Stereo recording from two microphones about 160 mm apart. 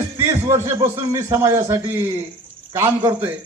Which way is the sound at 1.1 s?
20° right (ahead or behind).